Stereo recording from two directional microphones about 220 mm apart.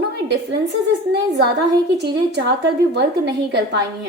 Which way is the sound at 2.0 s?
50° right (ahead or behind).